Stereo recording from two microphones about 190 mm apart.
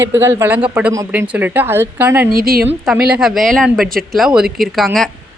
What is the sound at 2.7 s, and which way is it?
A woman's voice, 5° right (ahead or behind).